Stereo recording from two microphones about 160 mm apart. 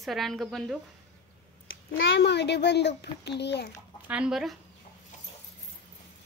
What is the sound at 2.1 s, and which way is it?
A child's voice, 90° left.